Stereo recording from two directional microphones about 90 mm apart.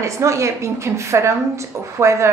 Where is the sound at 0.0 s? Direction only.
35° right (ahead or behind).